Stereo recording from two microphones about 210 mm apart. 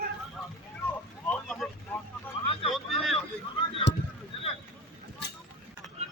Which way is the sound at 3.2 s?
25° left (ahead or behind).